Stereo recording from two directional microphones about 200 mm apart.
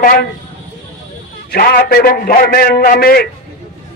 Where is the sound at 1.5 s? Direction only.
50° left (ahead or behind).